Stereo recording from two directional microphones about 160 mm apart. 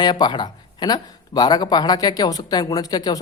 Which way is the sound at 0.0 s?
25° left (ahead or behind).